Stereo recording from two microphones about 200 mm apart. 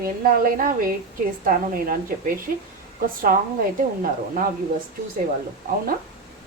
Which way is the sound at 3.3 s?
40° right (ahead or behind).